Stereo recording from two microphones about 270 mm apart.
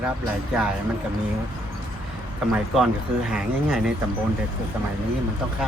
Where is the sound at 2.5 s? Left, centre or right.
Centre.